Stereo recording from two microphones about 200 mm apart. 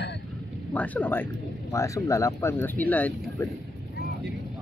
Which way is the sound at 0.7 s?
10° left (ahead or behind).